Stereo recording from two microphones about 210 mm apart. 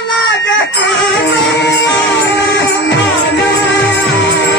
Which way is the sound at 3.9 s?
55° left (ahead or behind).